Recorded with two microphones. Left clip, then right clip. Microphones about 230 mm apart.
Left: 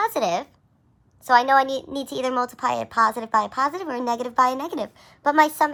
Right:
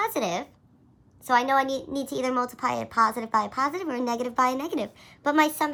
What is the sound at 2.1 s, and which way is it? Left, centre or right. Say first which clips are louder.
A woman's voice: left 3 dB; left.